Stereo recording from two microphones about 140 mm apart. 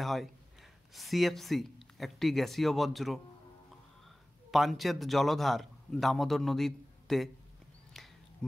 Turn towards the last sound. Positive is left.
turn(degrees=0)  # may be behind; listen again after turning